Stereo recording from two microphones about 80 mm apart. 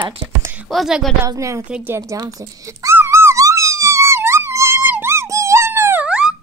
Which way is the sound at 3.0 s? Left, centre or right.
Right.